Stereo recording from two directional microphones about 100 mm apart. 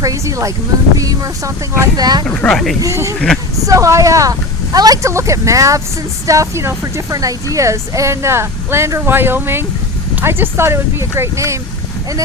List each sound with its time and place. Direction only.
0.0 s speech: 35° right (ahead or behind)
2.2 s speech: 10° left (ahead or behind)
2.8 s speech: 30° right (ahead or behind)